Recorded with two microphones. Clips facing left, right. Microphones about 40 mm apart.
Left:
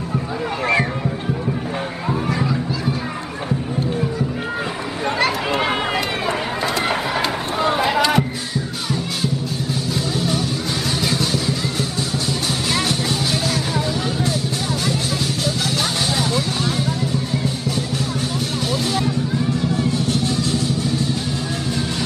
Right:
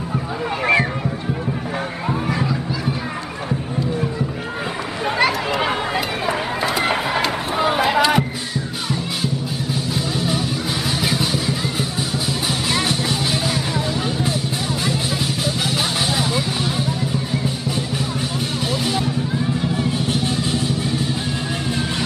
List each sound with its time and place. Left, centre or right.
2.0 s children playing: centre
5.9 s run: centre
9.9 s music: centre
11.1 s vehicle: centre
12.7 s music: centre
16.2 s music: centre
18.9 s music: centre